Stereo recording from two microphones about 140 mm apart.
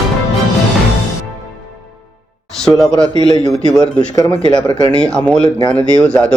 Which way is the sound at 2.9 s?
25° right (ahead or behind).